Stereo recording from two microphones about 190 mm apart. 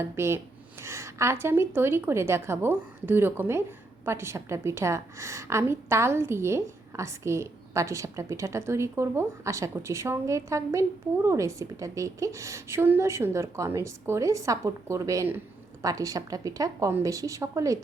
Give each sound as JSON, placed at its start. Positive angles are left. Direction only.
{"t": 0.0, "sound": "a woman's voice", "side_deg": -15}